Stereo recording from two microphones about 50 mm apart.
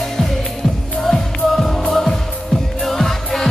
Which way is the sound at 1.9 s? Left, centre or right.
Centre.